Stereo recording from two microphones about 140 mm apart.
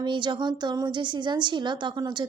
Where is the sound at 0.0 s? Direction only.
35° right (ahead or behind).